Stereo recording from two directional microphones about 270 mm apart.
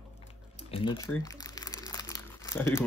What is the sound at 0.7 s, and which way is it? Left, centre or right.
Speech, centre.